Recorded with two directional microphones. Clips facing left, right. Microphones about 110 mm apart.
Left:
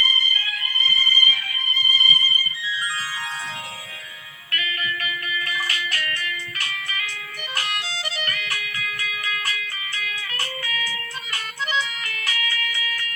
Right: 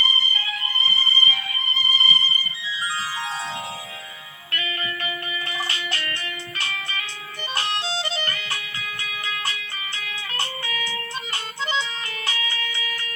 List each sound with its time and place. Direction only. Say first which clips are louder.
0.0 s music: even; 30° right (ahead or behind)
4.5 s music: left 1 dB; 30° right (ahead or behind)